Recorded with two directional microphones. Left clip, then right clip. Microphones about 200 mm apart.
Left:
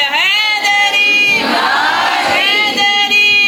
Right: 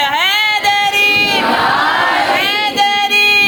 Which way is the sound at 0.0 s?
30° right (ahead or behind).